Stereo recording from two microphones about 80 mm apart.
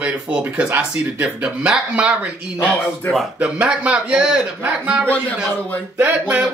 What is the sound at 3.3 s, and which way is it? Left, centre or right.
Speech, centre.